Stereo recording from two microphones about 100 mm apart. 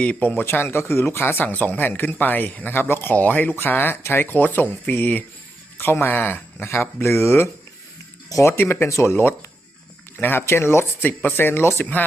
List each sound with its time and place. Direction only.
0.0 s speech: 15° left (ahead or behind)